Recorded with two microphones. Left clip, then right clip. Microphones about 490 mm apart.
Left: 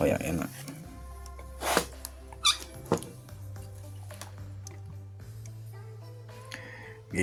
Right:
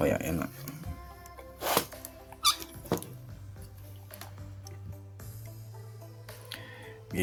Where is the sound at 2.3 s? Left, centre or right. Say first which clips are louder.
Left 1 dB; right.